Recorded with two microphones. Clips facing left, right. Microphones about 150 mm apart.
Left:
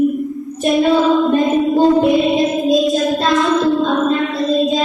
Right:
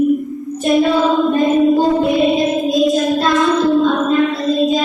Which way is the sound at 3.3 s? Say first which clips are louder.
Right 1 dB; centre (ahead or behind).